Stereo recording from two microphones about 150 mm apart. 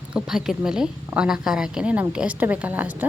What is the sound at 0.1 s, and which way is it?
A woman's voice, 5° right (ahead or behind).